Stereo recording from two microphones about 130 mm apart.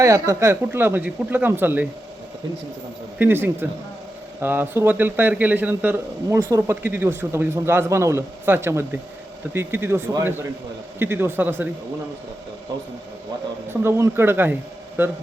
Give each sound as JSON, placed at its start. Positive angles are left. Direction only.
{"t": 0.0, "sound": "speech", "side_deg": -25}
{"t": 3.2, "sound": "a man's voice", "side_deg": -15}
{"t": 11.0, "sound": "speech", "side_deg": -15}
{"t": 13.8, "sound": "a man's voice", "side_deg": -20}